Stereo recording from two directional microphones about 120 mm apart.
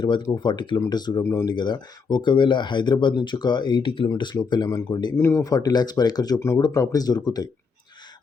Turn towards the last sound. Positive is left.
turn(degrees=35)  # may be behind; listen again after turning